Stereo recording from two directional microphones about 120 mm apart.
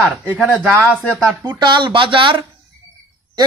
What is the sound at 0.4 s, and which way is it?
Speech, 5° right (ahead or behind).